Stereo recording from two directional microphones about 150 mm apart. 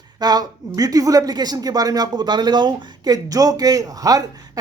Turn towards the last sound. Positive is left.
turn(degrees=-25)  # may be behind; listen again after turning